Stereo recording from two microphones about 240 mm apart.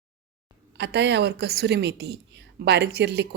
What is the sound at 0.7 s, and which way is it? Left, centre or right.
A woman's voice, right.